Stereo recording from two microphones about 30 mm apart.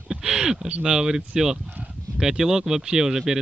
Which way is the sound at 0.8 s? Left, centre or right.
Right.